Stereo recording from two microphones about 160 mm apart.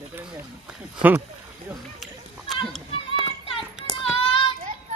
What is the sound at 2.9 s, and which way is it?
Children playing, 35° left (ahead or behind).